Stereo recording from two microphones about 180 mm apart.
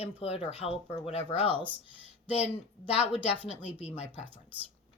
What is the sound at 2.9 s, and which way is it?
Speech, 35° left (ahead or behind).